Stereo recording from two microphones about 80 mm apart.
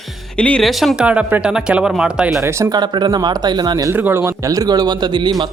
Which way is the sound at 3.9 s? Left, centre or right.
Right.